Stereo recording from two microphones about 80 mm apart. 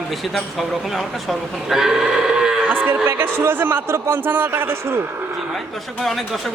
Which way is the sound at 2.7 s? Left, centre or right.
Right.